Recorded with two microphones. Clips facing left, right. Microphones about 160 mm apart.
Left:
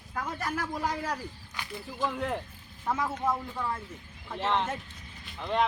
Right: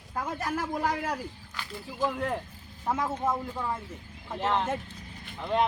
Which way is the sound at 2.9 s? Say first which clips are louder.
Right 1 dB; 15° right (ahead or behind).